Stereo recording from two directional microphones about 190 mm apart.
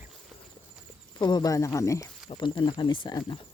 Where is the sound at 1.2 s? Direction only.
25° left (ahead or behind).